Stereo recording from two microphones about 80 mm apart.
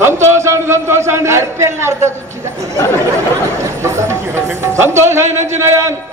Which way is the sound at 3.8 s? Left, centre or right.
Right.